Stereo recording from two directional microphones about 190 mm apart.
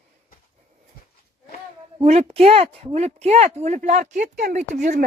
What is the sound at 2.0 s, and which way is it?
Speech, 35° right (ahead or behind).